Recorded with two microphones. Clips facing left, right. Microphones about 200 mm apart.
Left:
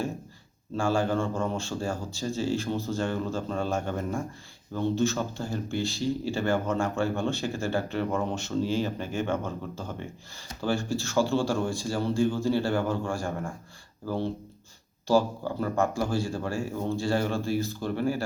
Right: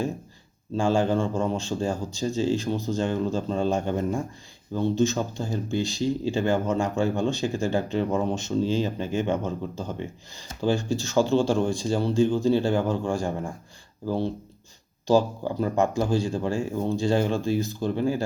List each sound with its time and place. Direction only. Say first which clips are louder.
0.8 s speech: right 3 dB; 20° right (ahead or behind)
15.0 s speech: right 3 dB; 20° right (ahead or behind)